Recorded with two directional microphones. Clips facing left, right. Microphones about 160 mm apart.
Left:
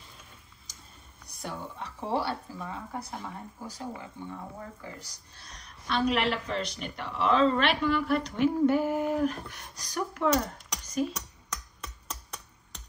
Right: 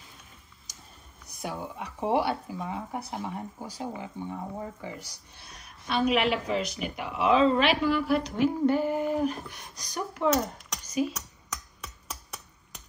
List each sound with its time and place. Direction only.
1.4 s speech: 15° right (ahead or behind)
4.6 s speech: 20° right (ahead or behind)
5.4 s speech: 5° right (ahead or behind)